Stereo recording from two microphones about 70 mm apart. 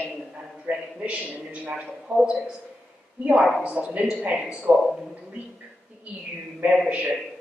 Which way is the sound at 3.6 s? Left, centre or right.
Centre.